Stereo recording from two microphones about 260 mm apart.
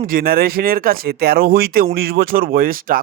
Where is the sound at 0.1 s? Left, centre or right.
Right.